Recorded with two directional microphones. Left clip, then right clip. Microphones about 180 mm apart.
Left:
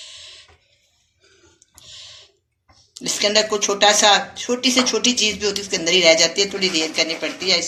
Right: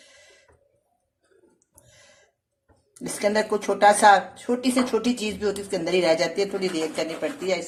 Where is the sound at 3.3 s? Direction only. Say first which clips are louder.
Left 5 dB; 40° right (ahead or behind).